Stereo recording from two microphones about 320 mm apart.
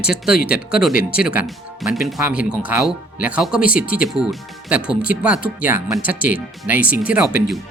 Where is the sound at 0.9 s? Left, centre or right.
Left.